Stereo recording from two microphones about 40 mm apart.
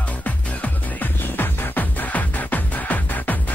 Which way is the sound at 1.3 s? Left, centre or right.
Left.